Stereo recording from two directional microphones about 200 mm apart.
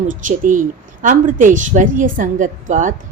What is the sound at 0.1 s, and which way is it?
A woman's voice, 40° right (ahead or behind).